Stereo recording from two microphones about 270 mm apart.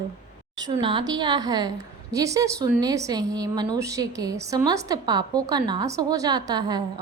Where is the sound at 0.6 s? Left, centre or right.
Centre.